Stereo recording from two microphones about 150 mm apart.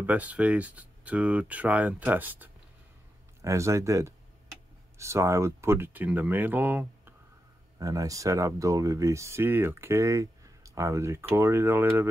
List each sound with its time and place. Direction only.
0.0 s speech: 10° right (ahead or behind)
7.8 s speech: 20° right (ahead or behind)